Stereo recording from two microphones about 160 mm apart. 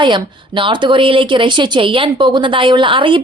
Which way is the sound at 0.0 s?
30° right (ahead or behind).